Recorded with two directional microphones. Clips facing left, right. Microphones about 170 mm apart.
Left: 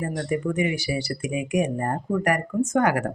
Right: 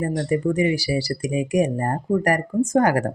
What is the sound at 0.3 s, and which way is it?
Speech, 35° right (ahead or behind).